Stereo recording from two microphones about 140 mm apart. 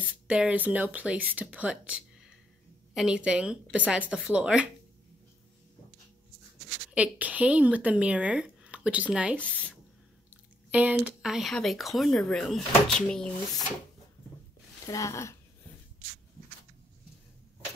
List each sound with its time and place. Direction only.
0.0 s speech: 10° right (ahead or behind)
6.9 s speech: 10° right (ahead or behind)
9.4 s speech: 10° left (ahead or behind)
10.7 s speech: 10° right (ahead or behind)
14.9 s speech: 25° left (ahead or behind)